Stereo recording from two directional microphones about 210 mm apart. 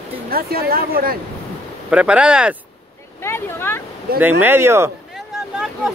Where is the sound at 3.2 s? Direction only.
10° left (ahead or behind).